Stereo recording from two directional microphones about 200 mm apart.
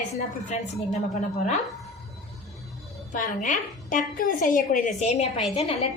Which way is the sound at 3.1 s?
40° left (ahead or behind).